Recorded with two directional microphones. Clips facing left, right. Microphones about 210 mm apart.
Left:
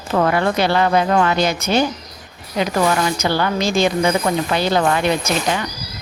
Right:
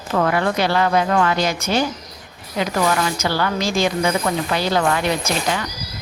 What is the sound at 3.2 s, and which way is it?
A woman's voice, 20° left (ahead or behind).